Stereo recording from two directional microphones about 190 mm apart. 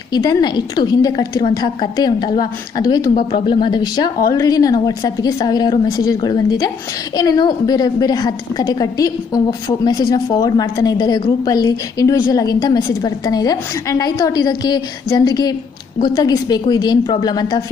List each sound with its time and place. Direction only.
0.1 s a woman's voice: 20° left (ahead or behind)